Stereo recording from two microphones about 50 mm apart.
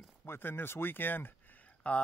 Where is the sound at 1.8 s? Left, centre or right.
Left.